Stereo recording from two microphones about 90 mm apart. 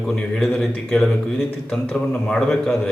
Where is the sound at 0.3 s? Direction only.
5° left (ahead or behind).